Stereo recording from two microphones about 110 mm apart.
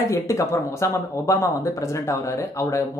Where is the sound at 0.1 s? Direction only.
25° left (ahead or behind).